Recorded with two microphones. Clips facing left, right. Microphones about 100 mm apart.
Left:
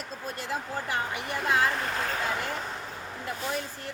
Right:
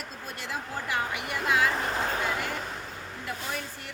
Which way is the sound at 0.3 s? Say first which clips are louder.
Left 1 dB; 35° left (ahead or behind).